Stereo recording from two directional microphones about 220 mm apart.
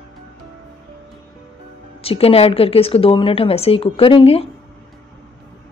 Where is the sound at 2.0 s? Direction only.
25° left (ahead or behind).